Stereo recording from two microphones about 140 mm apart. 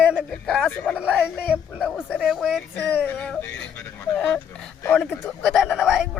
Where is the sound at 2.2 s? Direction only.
5° right (ahead or behind).